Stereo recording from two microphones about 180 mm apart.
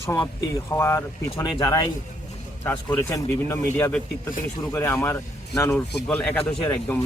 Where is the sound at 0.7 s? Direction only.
15° left (ahead or behind).